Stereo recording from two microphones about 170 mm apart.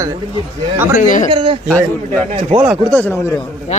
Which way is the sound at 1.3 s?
30° right (ahead or behind).